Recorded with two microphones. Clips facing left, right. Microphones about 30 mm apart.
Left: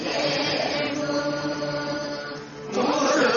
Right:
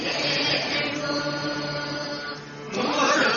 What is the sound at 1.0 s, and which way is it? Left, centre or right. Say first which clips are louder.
Mantra: left 2 dB; right.